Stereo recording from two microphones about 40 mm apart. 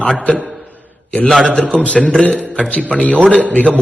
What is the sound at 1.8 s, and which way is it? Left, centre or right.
A man's voice, left.